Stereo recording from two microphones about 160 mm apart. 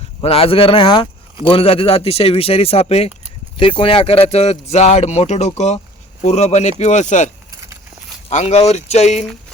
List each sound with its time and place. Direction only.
0.2 s speech: 35° left (ahead or behind)
8.3 s speech: 45° left (ahead or behind)